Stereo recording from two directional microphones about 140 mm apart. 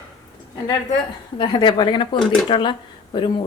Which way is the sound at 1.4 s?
35° left (ahead or behind).